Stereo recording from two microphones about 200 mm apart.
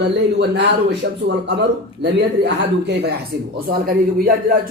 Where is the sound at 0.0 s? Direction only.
55° right (ahead or behind).